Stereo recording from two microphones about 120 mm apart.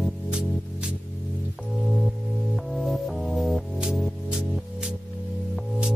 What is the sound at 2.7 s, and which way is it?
Music, centre (ahead or behind).